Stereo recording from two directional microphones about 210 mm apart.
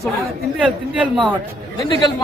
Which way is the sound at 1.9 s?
20° left (ahead or behind).